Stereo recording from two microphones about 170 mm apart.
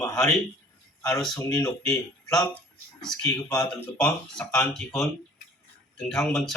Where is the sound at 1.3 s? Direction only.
20° left (ahead or behind).